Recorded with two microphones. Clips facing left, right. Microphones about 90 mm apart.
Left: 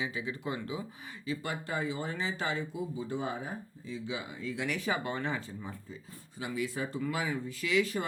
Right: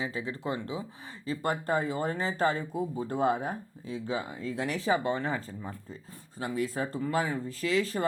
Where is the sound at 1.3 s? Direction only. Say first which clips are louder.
Right 6 dB; 45° right (ahead or behind).